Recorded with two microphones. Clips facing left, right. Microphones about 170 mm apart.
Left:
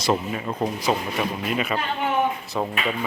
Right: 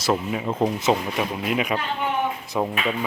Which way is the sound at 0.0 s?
5° right (ahead or behind).